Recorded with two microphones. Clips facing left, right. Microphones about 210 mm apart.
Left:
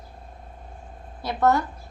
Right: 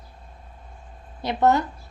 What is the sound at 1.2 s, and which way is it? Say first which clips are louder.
Speech: right 1 dB; 20° right (ahead or behind).